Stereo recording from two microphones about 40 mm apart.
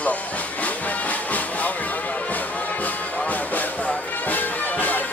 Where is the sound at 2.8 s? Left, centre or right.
Left.